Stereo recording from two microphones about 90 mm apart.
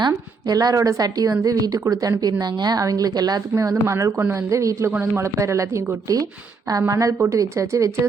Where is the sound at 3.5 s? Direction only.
35° right (ahead or behind).